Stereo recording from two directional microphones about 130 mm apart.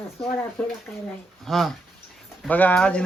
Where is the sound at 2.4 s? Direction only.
10° left (ahead or behind).